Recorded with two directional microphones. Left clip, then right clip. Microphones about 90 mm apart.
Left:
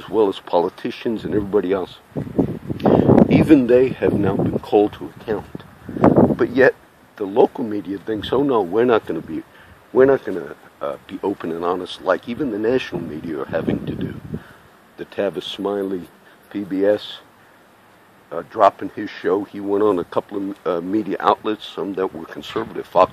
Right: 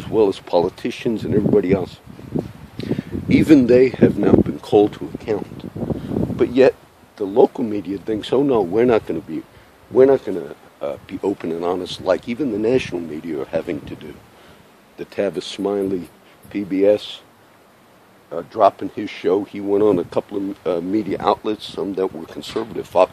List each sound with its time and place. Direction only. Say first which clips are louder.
0.0 s speech: right 1 dB; 35° right (ahead or behind)
2.8 s speech: left 14 dB; 25° right (ahead or behind)
4.7 s speech: right 2 dB; 50° right (ahead or behind)
6.3 s speech: right 1 dB; 35° right (ahead or behind)
15.0 s speech: right 1 dB; 35° right (ahead or behind)
18.3 s speech: even; 25° right (ahead or behind)